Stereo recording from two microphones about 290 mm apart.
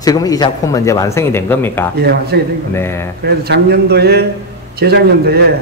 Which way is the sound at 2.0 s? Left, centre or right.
Right.